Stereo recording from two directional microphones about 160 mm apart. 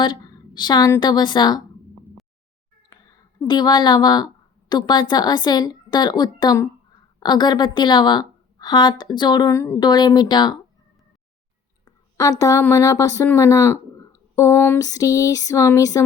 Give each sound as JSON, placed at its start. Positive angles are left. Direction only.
{"t": 0.0, "sound": "a woman's voice", "side_deg": 25}
{"t": 2.9, "sound": "a woman's voice", "side_deg": 25}
{"t": 11.9, "sound": "speech", "side_deg": 20}